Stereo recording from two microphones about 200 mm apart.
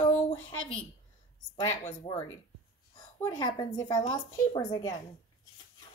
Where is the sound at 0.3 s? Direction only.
25° left (ahead or behind).